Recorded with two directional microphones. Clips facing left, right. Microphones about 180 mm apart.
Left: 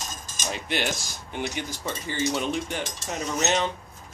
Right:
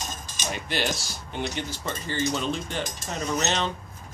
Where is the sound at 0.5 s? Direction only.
20° left (ahead or behind).